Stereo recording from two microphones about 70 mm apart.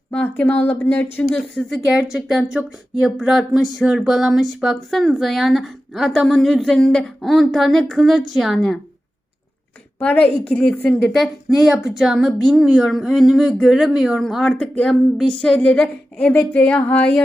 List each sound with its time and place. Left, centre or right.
0.1 s a woman's voice: left
1.9 s a woman's voice: centre
10.0 s a woman's voice: left
10.8 s a woman's voice: centre
14.5 s speech: centre
15.5 s speech: centre